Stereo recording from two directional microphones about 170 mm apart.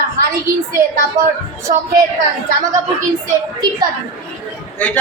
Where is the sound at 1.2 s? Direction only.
20° right (ahead or behind).